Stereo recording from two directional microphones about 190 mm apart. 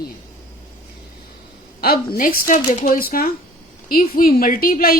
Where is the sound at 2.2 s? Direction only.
45° left (ahead or behind).